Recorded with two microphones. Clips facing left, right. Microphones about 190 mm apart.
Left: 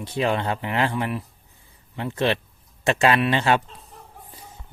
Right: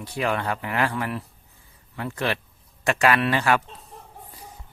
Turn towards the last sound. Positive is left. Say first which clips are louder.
# left 1 dB
turn(degrees=25)  # may be behind; listen again after turning